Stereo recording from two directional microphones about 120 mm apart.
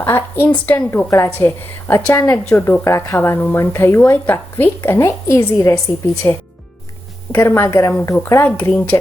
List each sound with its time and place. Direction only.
0.0 s speech: 15° left (ahead or behind)
2.5 s speech: 15° left (ahead or behind)